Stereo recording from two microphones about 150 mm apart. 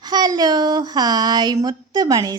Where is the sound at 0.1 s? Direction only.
25° right (ahead or behind).